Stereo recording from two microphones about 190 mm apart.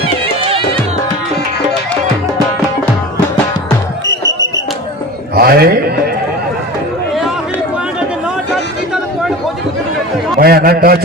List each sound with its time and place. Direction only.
5.3 s a man's voice: 55° right (ahead or behind)
10.4 s a man's voice: 55° right (ahead or behind)